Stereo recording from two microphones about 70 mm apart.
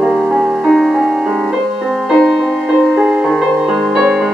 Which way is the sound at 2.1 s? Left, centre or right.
Centre.